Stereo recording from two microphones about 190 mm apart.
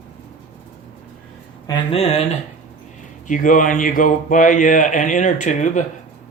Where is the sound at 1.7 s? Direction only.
30° left (ahead or behind).